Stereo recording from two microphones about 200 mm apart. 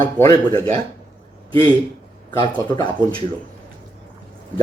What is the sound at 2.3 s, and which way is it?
Speech, 20° left (ahead or behind).